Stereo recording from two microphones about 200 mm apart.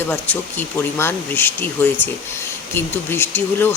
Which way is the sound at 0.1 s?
10° left (ahead or behind).